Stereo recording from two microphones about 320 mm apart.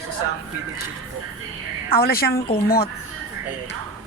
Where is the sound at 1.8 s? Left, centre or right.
Left.